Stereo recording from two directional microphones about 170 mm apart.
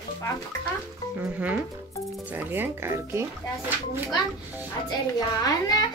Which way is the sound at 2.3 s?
10° right (ahead or behind).